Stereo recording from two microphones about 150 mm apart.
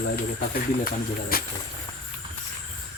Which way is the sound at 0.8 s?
80° left.